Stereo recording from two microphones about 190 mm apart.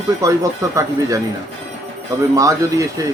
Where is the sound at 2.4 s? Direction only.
15° right (ahead or behind).